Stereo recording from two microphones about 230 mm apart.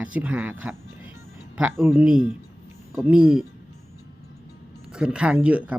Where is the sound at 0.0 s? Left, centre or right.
Centre.